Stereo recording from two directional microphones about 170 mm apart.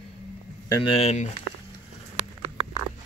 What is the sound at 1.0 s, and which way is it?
Speech, 40° left (ahead or behind).